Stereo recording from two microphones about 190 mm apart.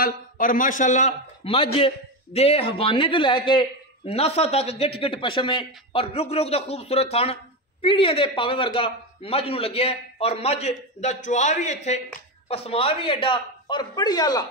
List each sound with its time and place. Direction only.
0.0 s a man's voice: 45° left (ahead or behind); by 14.4 s 20° left (ahead or behind)